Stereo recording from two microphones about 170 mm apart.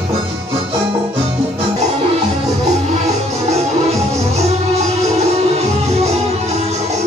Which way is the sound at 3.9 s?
40° right (ahead or behind).